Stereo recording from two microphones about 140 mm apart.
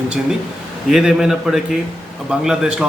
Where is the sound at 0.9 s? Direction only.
5° right (ahead or behind).